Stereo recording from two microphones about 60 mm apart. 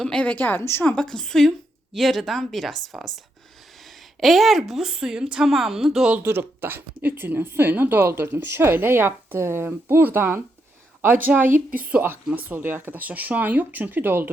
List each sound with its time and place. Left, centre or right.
0.2 s a woman's voice: left
0.6 s a woman's voice: left
0.9 s a woman's voice: centre
4.2 s a woman's voice: centre
6.2 s speech: right